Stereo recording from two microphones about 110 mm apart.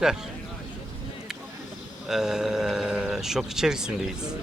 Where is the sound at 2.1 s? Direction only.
5° right (ahead or behind).